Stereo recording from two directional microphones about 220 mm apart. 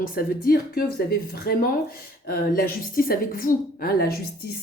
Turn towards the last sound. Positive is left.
turn(degrees=45)  # may be behind; listen again after turning